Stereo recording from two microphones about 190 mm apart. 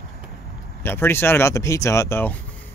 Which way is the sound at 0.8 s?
10° left (ahead or behind).